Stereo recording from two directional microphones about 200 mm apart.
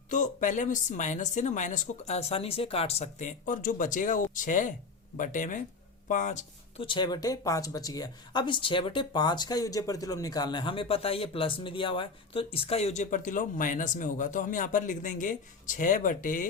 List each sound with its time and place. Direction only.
0.1 s speech: 40° left (ahead or behind)
6.8 s speech: 25° left (ahead or behind); by 16.5 s 40° left (ahead or behind)